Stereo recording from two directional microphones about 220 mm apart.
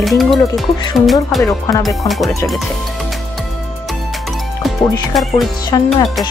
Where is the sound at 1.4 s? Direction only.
15° left (ahead or behind).